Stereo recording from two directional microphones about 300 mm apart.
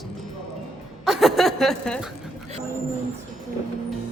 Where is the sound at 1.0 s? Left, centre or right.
Centre.